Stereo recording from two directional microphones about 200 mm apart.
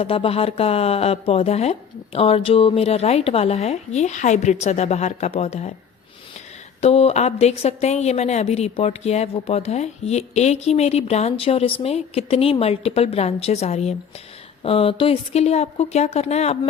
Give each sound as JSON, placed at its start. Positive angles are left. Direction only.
{"t": 0.0, "sound": "a woman's voice", "side_deg": 30}
{"t": 6.8, "sound": "a woman's voice", "side_deg": 30}